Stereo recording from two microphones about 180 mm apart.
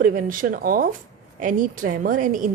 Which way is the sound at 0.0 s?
50° right (ahead or behind).